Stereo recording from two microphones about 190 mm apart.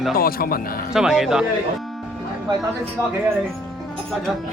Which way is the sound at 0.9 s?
Centre (ahead or behind).